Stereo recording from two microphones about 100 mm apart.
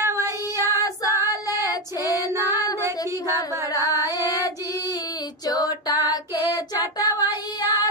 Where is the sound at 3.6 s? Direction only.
35° left (ahead or behind).